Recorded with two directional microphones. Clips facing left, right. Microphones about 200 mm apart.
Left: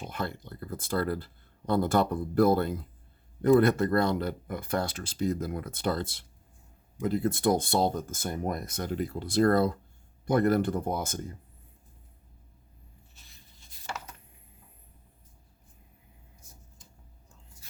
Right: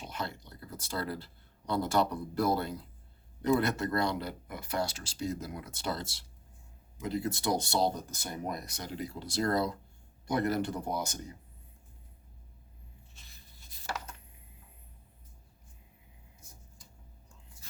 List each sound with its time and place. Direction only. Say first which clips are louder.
0.0 s speech: left 4 dB; 50° left (ahead or behind)